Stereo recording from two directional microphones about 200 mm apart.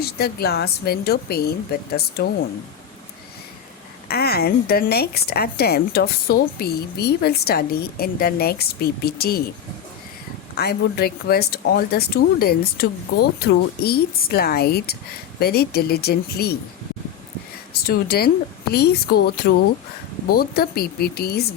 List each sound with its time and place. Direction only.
0.0 s a woman's voice: 50° left (ahead or behind)
4.1 s a woman's voice: 50° left (ahead or behind)
10.6 s a woman's voice: 50° left (ahead or behind)
17.8 s a woman's voice: 50° left (ahead or behind)